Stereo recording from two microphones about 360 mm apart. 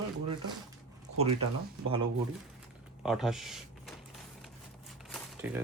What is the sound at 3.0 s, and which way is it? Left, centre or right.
Speech, centre.